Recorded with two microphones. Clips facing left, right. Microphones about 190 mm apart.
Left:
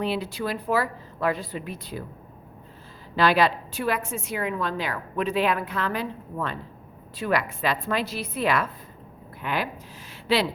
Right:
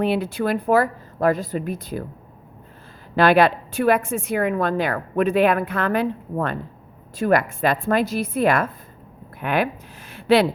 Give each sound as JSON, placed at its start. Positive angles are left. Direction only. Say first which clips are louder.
{"t": 0.0, "sound": "a woman's voice", "louder": "right 6 dB", "side_deg": -55}
{"t": 3.2, "sound": "a woman's voice", "louder": "right 5 dB", "side_deg": -55}
{"t": 10.1, "sound": "a sound", "louder": "right 7 dB", "side_deg": -55}